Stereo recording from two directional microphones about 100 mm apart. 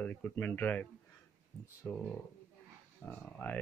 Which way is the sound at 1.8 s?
20° left (ahead or behind).